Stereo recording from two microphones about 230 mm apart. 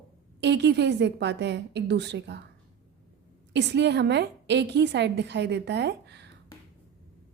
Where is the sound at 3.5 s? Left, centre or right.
Right.